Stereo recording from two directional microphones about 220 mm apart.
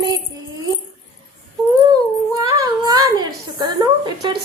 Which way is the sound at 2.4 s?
15° right (ahead or behind).